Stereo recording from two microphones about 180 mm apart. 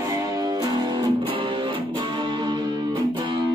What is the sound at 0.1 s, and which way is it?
Music, 20° right (ahead or behind).